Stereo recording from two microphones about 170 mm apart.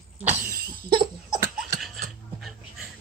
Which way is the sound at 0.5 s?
60° right (ahead or behind).